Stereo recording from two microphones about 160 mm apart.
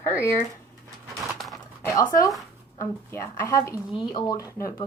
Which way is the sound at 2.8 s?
15° left (ahead or behind).